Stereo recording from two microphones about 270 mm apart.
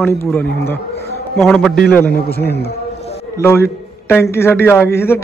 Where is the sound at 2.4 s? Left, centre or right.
Left.